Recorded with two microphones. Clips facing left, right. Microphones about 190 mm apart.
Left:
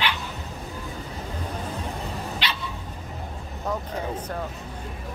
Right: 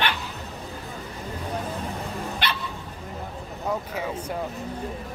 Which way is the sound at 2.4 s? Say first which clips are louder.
Right 3 dB; 55° right (ahead or behind).